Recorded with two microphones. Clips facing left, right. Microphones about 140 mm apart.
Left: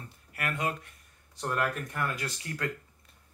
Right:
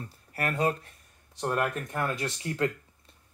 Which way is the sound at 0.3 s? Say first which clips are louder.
Right 5 dB; 35° right (ahead or behind).